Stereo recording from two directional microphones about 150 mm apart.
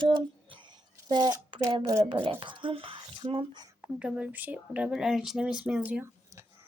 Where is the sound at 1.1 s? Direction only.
30° right (ahead or behind).